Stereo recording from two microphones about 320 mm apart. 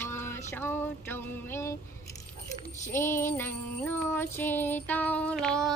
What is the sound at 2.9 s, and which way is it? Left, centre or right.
Music, centre.